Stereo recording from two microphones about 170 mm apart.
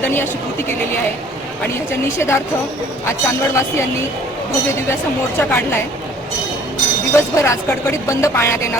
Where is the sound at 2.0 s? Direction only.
15° left (ahead or behind).